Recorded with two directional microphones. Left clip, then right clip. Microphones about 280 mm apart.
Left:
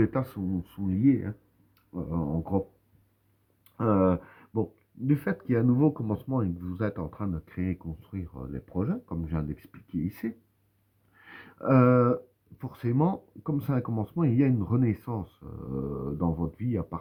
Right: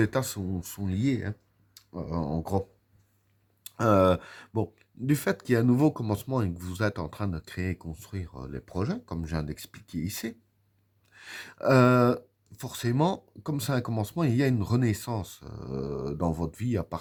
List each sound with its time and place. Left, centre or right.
0.0 s speech: right
3.6 s speech: right